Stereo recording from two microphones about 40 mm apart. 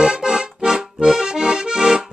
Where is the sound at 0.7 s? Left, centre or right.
Centre.